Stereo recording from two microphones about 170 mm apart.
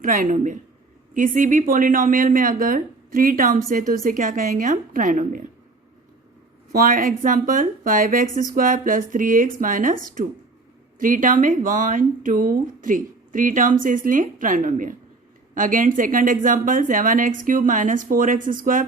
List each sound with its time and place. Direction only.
0.0 s speech: 55° right (ahead or behind)
6.7 s speech: 55° right (ahead or behind)